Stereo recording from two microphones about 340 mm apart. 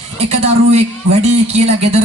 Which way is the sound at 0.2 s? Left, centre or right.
Centre.